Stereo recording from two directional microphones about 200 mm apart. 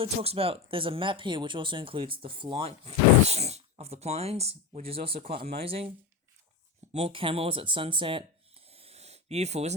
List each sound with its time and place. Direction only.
0.0 s speech: 30° right (ahead or behind)
6.9 s speech: 30° right (ahead or behind)
8.7 s a sound: 30° right (ahead or behind)